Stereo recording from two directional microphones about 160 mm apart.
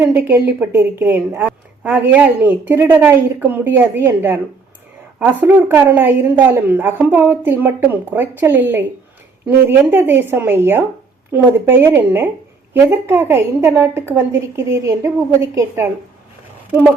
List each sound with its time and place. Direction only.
0.0 s a woman's voice: 15° right (ahead or behind)